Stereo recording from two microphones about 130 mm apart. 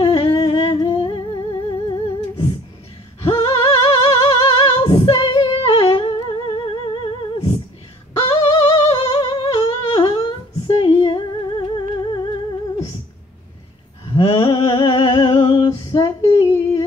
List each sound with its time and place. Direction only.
0.0 s humming: 40° left (ahead or behind)
3.2 s music: 35° left (ahead or behind)
8.2 s humming: 40° left (ahead or behind)
14.0 s a sound: 35° left (ahead or behind)